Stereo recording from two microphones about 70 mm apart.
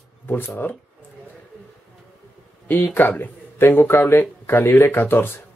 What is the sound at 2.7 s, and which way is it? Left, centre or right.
Speech, left.